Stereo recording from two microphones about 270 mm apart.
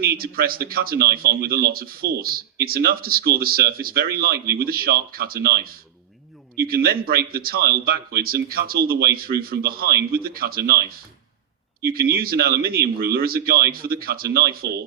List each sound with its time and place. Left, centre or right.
0.0 s speech: right